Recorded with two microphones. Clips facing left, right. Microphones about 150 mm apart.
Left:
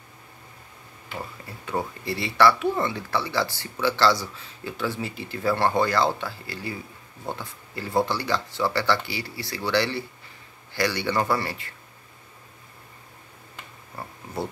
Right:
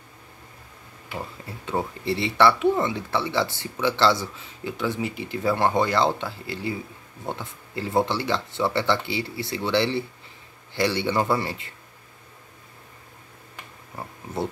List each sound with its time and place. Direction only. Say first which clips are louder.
1.7 s speech: right 2 dB; 25° right (ahead or behind)